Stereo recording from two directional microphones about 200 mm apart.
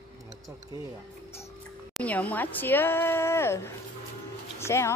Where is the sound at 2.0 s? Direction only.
5° left (ahead or behind).